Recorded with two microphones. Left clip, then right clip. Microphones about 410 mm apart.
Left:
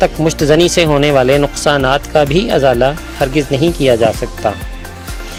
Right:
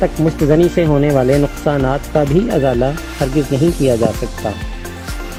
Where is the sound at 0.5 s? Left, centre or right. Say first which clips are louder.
Left 3 dB; left.